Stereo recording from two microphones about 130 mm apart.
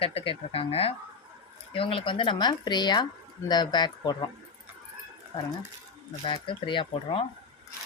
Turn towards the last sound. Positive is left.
turn(degrees=40)  # may be behind; listen again after turning